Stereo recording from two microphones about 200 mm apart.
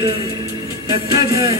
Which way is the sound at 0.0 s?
20° right (ahead or behind).